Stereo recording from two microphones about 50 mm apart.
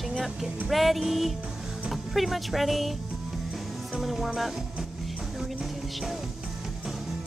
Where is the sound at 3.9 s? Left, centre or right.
Centre.